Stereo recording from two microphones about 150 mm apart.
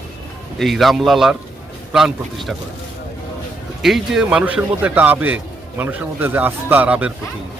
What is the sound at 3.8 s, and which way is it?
A man's voice, centre (ahead or behind).